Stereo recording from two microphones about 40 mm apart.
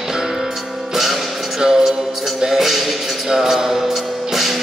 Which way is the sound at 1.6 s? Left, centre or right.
Centre.